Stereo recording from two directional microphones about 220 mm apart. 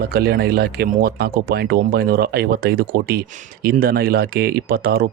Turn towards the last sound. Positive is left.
turn(degrees=-45)  # may be behind; listen again after turning